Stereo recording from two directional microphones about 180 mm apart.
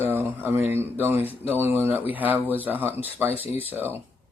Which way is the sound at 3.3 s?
30° left (ahead or behind).